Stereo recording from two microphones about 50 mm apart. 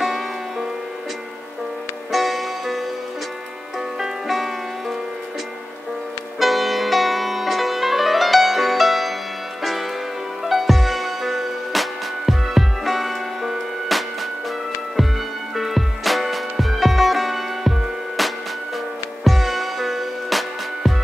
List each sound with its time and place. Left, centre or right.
0.0 s music: centre
2.1 s music: centre
4.0 s music: centre
6.4 s music: centre
15.5 s music: centre